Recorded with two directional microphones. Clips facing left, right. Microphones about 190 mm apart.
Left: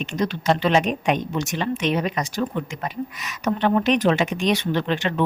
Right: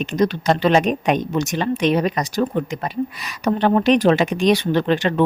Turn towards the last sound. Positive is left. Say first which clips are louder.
# right 5 dB
turn(degrees=-40)  # may be behind; listen again after turning